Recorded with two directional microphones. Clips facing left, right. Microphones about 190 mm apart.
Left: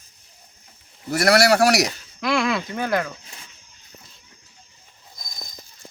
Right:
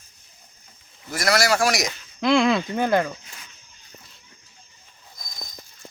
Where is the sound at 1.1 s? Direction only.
65° left (ahead or behind).